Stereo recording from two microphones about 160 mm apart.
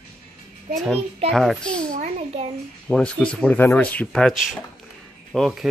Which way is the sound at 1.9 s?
45° right (ahead or behind).